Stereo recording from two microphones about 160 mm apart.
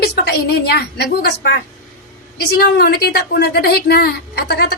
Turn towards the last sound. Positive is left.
turn(degrees=80)